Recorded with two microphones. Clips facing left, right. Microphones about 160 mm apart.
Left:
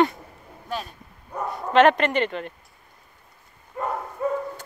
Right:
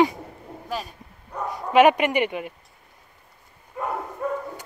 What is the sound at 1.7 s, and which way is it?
Speech, 10° right (ahead or behind).